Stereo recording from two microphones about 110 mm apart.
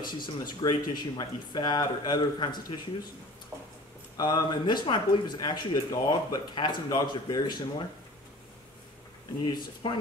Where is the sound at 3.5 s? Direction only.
25° right (ahead or behind).